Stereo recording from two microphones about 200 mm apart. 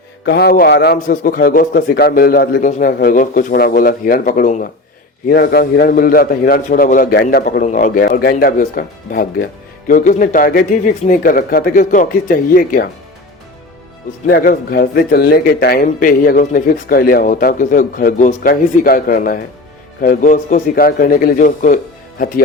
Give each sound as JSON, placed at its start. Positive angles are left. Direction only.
{"t": 0.3, "sound": "speech", "side_deg": 50}
{"t": 0.9, "sound": "speech", "side_deg": 45}
{"t": 14.3, "sound": "a man's voice", "side_deg": 50}